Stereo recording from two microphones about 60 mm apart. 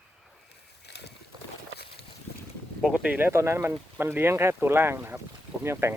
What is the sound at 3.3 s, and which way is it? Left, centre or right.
Speech, right.